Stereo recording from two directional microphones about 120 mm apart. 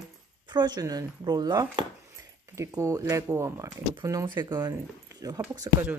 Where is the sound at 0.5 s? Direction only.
35° right (ahead or behind).